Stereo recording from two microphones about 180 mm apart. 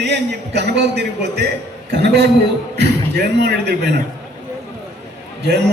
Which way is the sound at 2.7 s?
65° right (ahead or behind).